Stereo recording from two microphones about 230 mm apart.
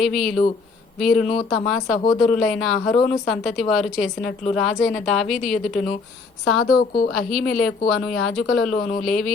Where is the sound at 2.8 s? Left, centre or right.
Centre.